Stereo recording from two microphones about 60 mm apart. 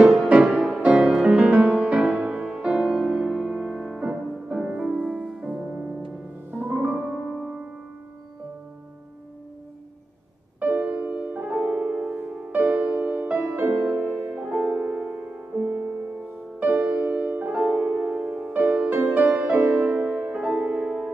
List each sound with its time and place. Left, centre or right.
0.3 s music: centre
6.5 s music: right
6.9 s music: centre
10.6 s music: right
12.1 s music: right
14.4 s music: centre